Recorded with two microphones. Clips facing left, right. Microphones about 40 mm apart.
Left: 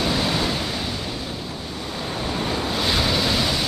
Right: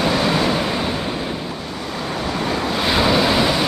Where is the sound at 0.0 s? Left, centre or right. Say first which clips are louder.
Right 5 dB; right.